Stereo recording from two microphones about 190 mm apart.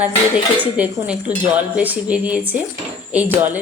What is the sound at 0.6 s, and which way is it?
Speech, 10° right (ahead or behind).